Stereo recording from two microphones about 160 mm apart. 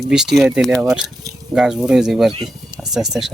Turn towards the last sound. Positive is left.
turn(degrees=0)  # may be behind; listen again after turning